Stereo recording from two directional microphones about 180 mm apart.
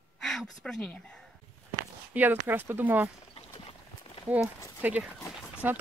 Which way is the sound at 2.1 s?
10° right (ahead or behind).